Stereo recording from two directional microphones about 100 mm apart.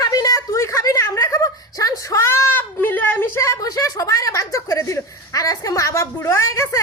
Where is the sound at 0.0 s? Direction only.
35° left (ahead or behind).